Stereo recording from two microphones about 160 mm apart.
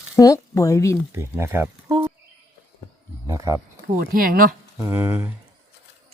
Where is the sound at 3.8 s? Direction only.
65° right (ahead or behind).